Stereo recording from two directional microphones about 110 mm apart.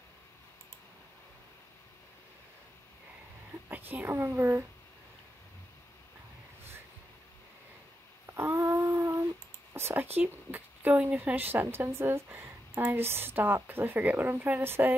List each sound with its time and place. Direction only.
3.9 s a woman's voice: 20° right (ahead or behind)
8.3 s humming: 25° right (ahead or behind)
9.8 s a woman's voice: 20° right (ahead or behind)